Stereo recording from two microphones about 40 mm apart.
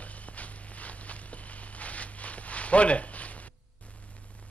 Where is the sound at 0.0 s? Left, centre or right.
Left.